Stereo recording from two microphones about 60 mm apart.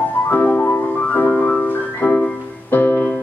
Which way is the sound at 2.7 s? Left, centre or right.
Left.